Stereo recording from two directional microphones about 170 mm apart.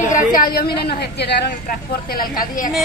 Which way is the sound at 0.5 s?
70° left (ahead or behind).